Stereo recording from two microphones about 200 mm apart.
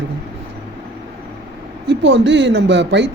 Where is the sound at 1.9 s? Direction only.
60° right (ahead or behind).